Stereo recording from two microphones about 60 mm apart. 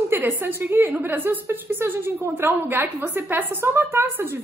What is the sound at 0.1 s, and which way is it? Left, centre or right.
A woman's voice, right.